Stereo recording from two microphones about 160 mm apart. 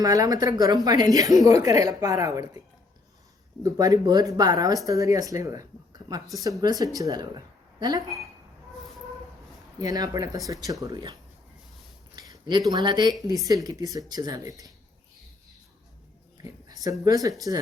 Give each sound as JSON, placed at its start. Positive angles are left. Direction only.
{"t": 0.0, "sound": "speech", "side_deg": -20}
{"t": 3.6, "sound": "speech", "side_deg": -20}
{"t": 9.8, "sound": "speech", "side_deg": -25}
{"t": 12.3, "sound": "speech", "side_deg": -25}
{"t": 16.4, "sound": "a sound", "side_deg": -20}
{"t": 17.5, "sound": "speech", "side_deg": -20}